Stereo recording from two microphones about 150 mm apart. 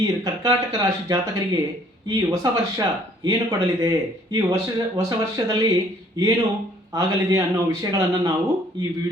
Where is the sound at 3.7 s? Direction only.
25° right (ahead or behind).